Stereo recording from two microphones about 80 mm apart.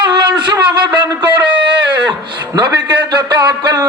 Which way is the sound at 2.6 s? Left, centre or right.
Right.